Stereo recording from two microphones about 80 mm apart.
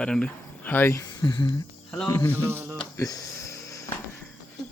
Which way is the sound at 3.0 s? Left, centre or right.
Left.